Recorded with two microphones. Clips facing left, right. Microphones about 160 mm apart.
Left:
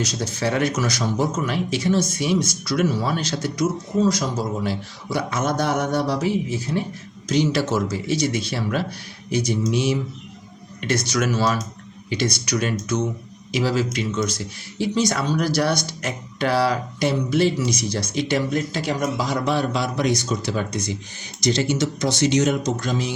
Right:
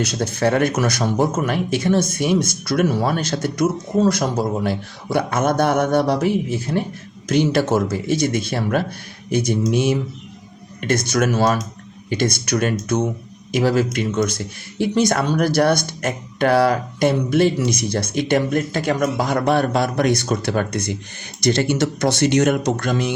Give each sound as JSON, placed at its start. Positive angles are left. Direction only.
{"t": 0.0, "sound": "speech", "side_deg": -55}